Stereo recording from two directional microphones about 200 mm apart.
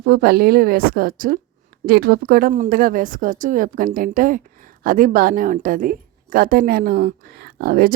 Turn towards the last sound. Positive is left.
turn(degrees=-50)  # may be behind; listen again after turning